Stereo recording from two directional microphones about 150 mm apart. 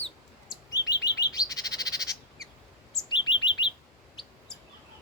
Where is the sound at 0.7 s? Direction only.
25° left (ahead or behind).